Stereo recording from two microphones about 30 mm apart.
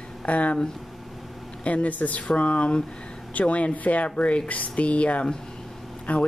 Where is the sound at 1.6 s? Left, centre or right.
Left.